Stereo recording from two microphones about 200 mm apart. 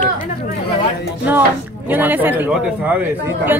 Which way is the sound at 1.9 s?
10° right (ahead or behind).